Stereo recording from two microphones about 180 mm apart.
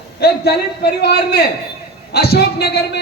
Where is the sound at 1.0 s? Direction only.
65° left (ahead or behind).